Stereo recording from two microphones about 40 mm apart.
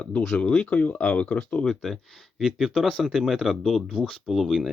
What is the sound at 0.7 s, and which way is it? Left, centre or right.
Speech, left.